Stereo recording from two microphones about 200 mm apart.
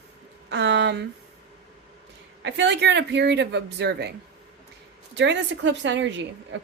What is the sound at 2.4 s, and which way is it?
A woman's voice, 60° right (ahead or behind).